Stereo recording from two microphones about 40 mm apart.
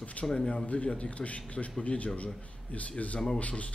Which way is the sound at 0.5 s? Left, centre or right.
Left.